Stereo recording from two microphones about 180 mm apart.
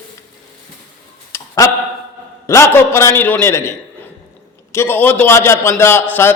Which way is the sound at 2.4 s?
15° left (ahead or behind).